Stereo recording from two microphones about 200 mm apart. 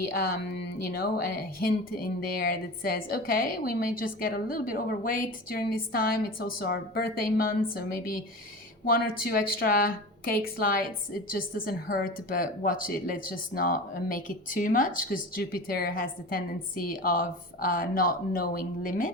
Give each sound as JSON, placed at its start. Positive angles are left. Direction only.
{"t": 0.0, "sound": "a woman's voice", "side_deg": 50}